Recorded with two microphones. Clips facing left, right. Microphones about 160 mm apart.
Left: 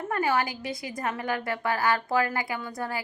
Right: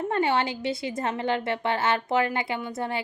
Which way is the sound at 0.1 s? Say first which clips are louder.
Even; 25° right (ahead or behind).